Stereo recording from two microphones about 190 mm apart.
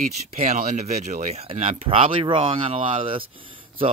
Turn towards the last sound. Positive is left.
turn(degrees=-30)  # may be behind; listen again after turning